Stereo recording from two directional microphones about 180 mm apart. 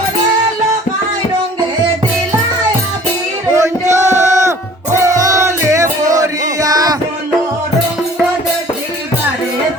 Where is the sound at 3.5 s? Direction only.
15° right (ahead or behind).